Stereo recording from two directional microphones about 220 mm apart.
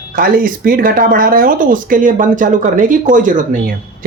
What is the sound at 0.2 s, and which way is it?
Speech, 40° right (ahead or behind).